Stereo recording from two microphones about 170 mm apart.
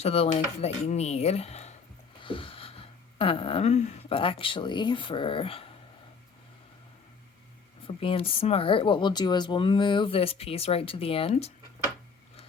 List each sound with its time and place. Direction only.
0.0 s speech: 35° left (ahead or behind)
2.2 s a sound: 30° left (ahead or behind)
7.9 s speech: 30° left (ahead or behind)